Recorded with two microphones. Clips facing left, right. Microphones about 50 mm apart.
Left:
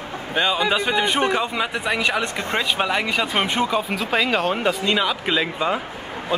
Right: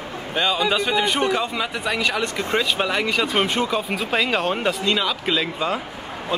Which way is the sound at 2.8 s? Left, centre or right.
Centre.